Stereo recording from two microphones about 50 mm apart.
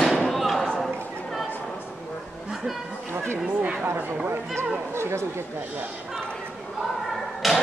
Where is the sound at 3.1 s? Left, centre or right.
Right.